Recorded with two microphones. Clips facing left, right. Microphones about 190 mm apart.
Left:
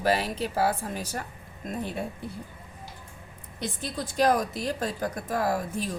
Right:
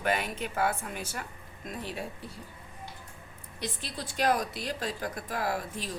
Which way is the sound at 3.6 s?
45° left (ahead or behind).